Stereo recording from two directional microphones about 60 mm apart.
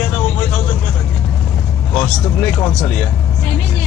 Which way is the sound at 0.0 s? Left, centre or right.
Centre.